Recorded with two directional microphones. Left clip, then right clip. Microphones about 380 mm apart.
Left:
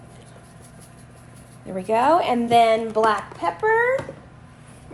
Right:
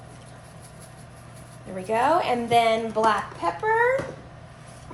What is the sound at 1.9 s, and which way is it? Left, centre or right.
A woman's voice, centre.